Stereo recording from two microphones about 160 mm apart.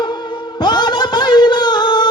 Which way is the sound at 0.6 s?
25° left (ahead or behind).